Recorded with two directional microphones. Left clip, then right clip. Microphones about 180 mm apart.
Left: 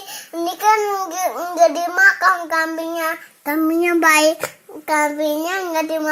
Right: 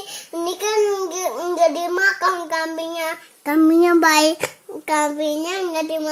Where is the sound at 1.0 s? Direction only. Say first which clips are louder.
Left 1 dB; 15° right (ahead or behind).